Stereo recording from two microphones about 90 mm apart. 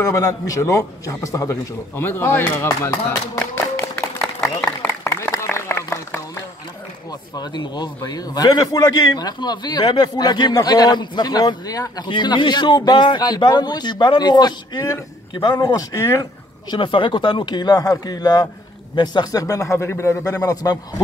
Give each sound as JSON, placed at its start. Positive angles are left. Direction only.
{"t": 0.0, "sound": "a man's voice", "side_deg": 35}
{"t": 2.0, "sound": "speech", "side_deg": 25}
{"t": 3.3, "sound": "clapping", "side_deg": 20}
{"t": 5.0, "sound": "a sound", "side_deg": 30}
{"t": 7.1, "sound": "a man's voice", "side_deg": 50}
{"t": 12.1, "sound": "a man's voice", "side_deg": 60}
{"t": 16.7, "sound": "a man's voice", "side_deg": 70}
{"t": 20.4, "sound": "a man's voice", "side_deg": 50}